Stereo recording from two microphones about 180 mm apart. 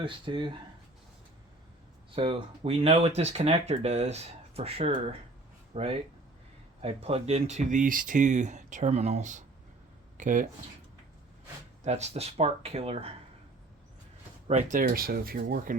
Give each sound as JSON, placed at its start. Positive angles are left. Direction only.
{"t": 0.0, "sound": "speech", "side_deg": -25}
{"t": 2.1, "sound": "speech", "side_deg": -30}
{"t": 11.8, "sound": "speech", "side_deg": -40}
{"t": 14.4, "sound": "speech", "side_deg": -40}